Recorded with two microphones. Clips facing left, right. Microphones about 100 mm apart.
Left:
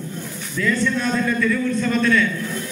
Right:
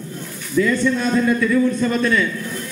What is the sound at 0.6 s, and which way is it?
Speech, 15° right (ahead or behind).